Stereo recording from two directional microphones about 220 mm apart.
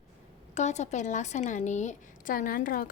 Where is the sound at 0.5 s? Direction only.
30° left (ahead or behind).